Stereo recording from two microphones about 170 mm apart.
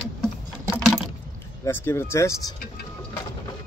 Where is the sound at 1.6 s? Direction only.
15° left (ahead or behind).